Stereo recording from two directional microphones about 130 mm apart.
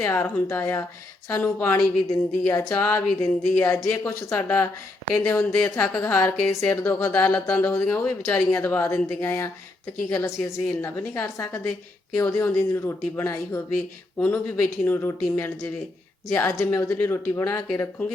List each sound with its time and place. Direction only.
0.0 s a woman's voice: 20° left (ahead or behind)